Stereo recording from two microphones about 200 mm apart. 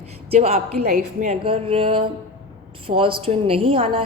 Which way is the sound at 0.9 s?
45° right (ahead or behind).